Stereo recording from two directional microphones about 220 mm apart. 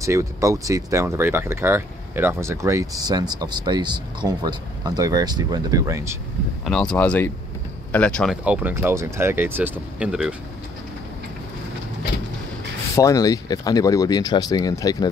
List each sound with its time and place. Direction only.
0.0 s speech: 15° right (ahead or behind)
6.6 s speech: 5° left (ahead or behind)
12.9 s speech: 15° left (ahead or behind)